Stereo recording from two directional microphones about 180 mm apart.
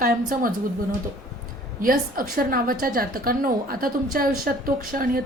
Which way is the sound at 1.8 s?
50° right (ahead or behind).